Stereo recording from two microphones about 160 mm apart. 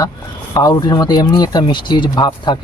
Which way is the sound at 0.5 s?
25° left (ahead or behind).